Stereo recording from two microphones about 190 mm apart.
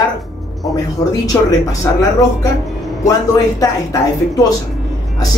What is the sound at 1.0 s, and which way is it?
Speech, 15° left (ahead or behind).